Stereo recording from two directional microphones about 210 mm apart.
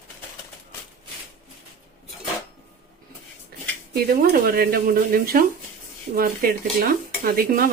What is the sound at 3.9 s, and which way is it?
Dishes, 45° right (ahead or behind).